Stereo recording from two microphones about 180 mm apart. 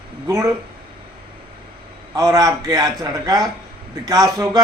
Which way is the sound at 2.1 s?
20° right (ahead or behind).